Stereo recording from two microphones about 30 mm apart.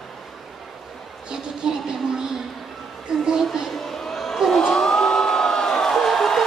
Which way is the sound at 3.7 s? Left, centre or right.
Centre.